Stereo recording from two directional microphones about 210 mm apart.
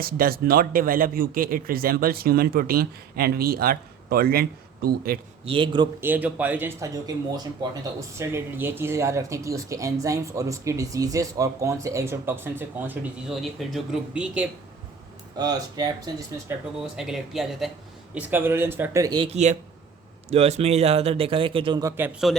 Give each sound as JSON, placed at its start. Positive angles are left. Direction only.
{"t": 0.0, "sound": "a man's voice", "side_deg": -45}
{"t": 5.5, "sound": "speech", "side_deg": -20}
{"t": 6.0, "sound": "speech", "side_deg": -10}
{"t": 15.4, "sound": "speech", "side_deg": -20}
{"t": 16.8, "sound": "speech", "side_deg": 0}